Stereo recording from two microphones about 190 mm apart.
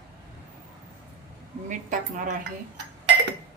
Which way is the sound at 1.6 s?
40° right (ahead or behind).